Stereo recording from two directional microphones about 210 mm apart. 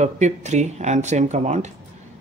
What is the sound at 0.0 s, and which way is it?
Speech, 35° right (ahead or behind).